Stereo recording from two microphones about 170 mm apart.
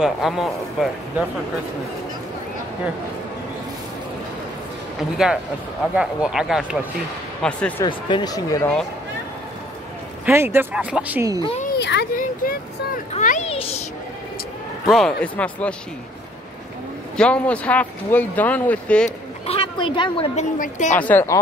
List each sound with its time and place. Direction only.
0.0 s speech: centre (ahead or behind)
5.1 s speech: 5° right (ahead or behind)
7.8 s speech: 25° left (ahead or behind)
10.2 s speech: 15° right (ahead or behind)
11.7 s speech: 80° left
12.2 s speech: 55° left (ahead or behind)
13.1 s a woman's voice: 45° left (ahead or behind)
13.5 s a child's voice: 35° left (ahead or behind)
14.9 s speech: 5° left (ahead or behind)
17.2 s speech: 5° left (ahead or behind)
19.0 s a woman's voice: 35° left (ahead or behind)
20.3 s a woman's voice: 50° left (ahead or behind)
20.9 s speech: 10° left (ahead or behind)